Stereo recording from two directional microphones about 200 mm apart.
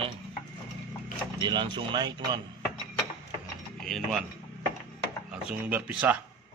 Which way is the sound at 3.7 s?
Centre (ahead or behind).